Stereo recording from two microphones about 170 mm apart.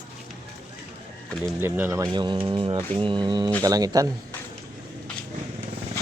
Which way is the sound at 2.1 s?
30° right (ahead or behind).